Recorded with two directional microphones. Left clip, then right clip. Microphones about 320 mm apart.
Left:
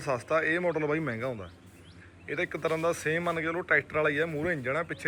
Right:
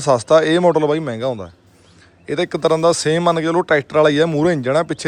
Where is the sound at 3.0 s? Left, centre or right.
Right.